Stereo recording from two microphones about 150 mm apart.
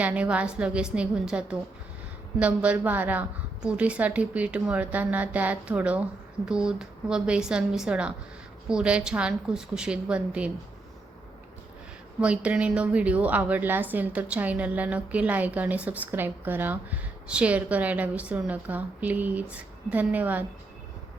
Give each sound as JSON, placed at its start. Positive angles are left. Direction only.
{"t": 0.0, "sound": "a woman's voice", "side_deg": -10}
{"t": 12.2, "sound": "a woman's voice", "side_deg": -10}